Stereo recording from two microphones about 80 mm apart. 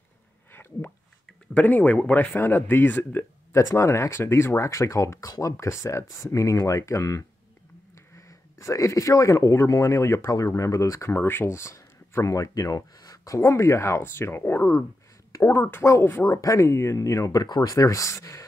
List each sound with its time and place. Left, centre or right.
0.5 s a sound: left
1.2 s speech: centre
3.5 s speech: left
13.4 s speech: left